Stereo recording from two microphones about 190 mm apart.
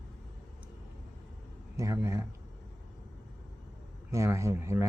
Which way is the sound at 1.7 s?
15° right (ahead or behind).